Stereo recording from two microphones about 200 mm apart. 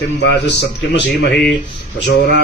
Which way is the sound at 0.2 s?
60° left (ahead or behind).